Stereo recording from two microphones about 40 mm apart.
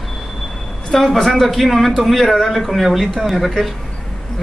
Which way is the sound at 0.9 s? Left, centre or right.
Centre.